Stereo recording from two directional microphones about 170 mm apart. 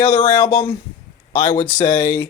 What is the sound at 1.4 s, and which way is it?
Speech, 45° left (ahead or behind).